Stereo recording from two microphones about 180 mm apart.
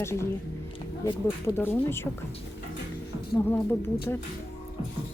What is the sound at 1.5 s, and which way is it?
Speech, 10° left (ahead or behind).